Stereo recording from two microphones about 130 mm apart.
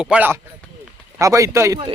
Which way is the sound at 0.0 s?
5° right (ahead or behind).